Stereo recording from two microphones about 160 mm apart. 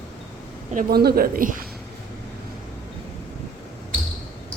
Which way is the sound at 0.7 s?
80° right.